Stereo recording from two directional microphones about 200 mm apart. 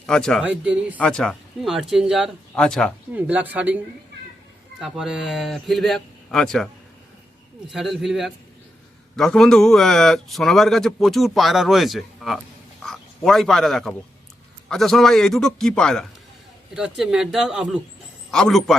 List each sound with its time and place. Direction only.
0.0 s speech: 5° left (ahead or behind)
0.9 s speech: 5° left (ahead or behind)
3.1 s speech: 10° right (ahead or behind)
4.8 s speech: 5° right (ahead or behind)
7.7 s speech: centre (ahead or behind)